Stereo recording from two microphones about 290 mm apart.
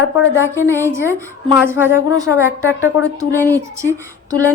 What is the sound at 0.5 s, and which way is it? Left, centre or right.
Speech, centre.